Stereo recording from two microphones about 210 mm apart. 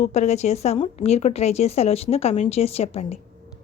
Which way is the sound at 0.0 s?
30° left (ahead or behind).